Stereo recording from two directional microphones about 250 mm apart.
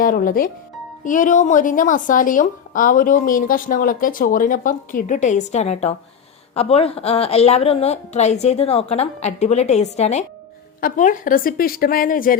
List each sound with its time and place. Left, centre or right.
0.0 s a woman's voice: left